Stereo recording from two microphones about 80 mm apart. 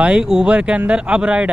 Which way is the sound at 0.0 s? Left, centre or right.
Centre.